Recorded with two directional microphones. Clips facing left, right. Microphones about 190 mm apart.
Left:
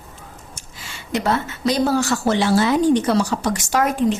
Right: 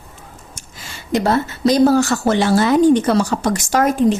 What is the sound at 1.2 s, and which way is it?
Speech, 40° right (ahead or behind).